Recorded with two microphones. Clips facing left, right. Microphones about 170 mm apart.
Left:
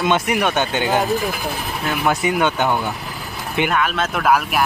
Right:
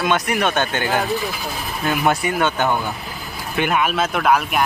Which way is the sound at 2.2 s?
15° left (ahead or behind).